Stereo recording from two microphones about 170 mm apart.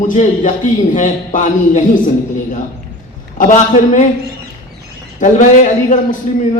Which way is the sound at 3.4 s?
45° left (ahead or behind).